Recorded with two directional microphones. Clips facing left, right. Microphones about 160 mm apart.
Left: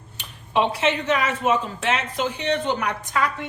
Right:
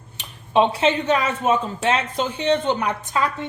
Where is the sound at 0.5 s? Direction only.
30° right (ahead or behind).